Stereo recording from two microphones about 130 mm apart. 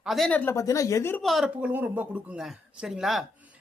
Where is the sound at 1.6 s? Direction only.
15° right (ahead or behind).